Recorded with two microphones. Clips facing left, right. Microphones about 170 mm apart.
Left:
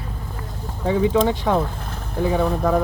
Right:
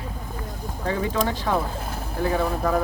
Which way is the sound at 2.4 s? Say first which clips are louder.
Left 4 dB; centre (ahead or behind).